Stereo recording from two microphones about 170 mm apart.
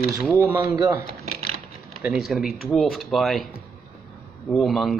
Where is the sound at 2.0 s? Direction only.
Centre (ahead or behind).